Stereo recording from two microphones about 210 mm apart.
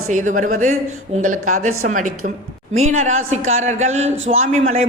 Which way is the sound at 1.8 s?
40° right (ahead or behind).